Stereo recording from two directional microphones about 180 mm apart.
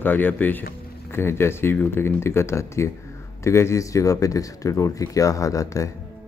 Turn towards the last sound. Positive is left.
turn(degrees=20)  # may be behind; listen again after turning